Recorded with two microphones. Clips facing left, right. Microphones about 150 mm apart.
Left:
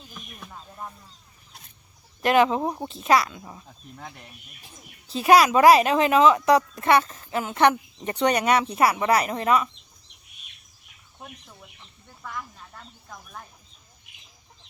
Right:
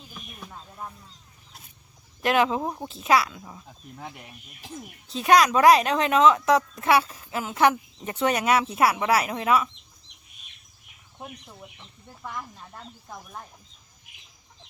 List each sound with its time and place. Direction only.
0.1 s a sound: 5° right (ahead or behind)
2.2 s speech: centre (ahead or behind)
5.0 s speech: centre (ahead or behind)
11.2 s speech: 20° right (ahead or behind)